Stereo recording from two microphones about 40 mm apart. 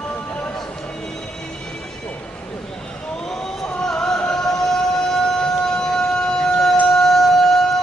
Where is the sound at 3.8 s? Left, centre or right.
Centre.